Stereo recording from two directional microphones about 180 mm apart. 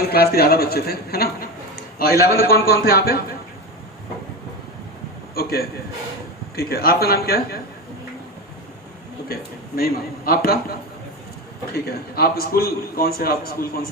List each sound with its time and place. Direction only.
0.0 s a man's voice: 60° left (ahead or behind)
5.3 s a man's voice: 60° left (ahead or behind)
9.3 s a man's voice: 60° left (ahead or behind)